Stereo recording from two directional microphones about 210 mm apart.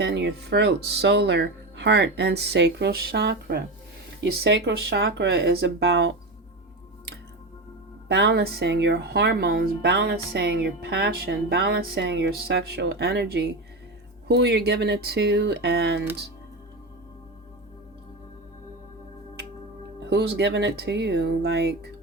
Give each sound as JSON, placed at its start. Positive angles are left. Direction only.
{"t": 0.0, "sound": "a woman's voice", "side_deg": -55}
{"t": 8.0, "sound": "a woman's voice", "side_deg": -55}
{"t": 20.0, "sound": "speech", "side_deg": -50}